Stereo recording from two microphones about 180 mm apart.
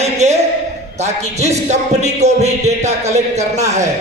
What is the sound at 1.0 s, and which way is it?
Music, 40° right (ahead or behind).